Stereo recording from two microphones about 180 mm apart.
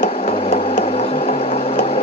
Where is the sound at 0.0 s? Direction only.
40° left (ahead or behind).